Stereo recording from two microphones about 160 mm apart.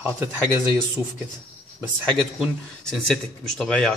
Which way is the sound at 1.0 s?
25° left (ahead or behind).